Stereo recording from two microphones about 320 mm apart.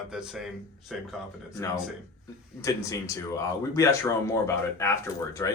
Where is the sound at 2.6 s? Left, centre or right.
Centre.